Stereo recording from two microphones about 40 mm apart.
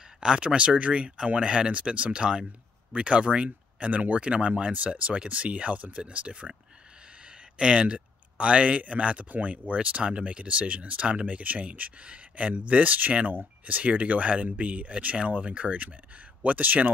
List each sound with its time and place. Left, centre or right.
0.2 s speech: centre; by 16.9 s right